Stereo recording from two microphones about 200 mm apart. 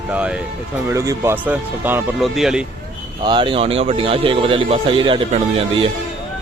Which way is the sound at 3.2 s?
25° right (ahead or behind).